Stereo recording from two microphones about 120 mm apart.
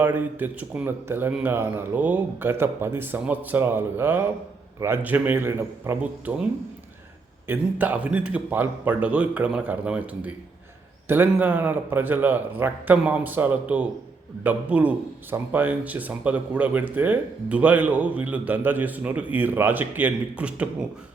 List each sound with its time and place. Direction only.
0.0 s a man's voice: 15° right (ahead or behind)
7.4 s a man's voice: 15° right (ahead or behind)